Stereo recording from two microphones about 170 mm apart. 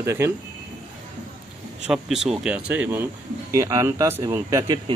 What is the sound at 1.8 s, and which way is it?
Speech, 5° right (ahead or behind).